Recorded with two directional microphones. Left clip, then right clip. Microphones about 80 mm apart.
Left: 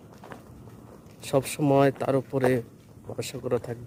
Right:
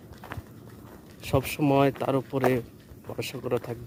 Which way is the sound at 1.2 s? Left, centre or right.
Left.